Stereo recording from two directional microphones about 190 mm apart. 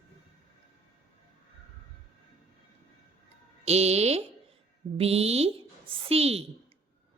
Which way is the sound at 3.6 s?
35° right (ahead or behind).